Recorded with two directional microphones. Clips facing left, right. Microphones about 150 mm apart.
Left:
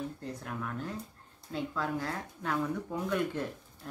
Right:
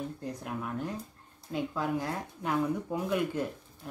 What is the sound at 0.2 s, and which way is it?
Speech, 15° right (ahead or behind).